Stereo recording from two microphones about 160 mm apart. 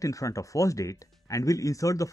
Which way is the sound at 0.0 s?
20° left (ahead or behind).